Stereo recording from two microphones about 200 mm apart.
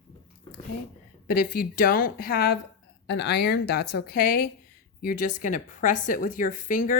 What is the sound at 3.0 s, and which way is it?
A woman's voice, 60° left (ahead or behind).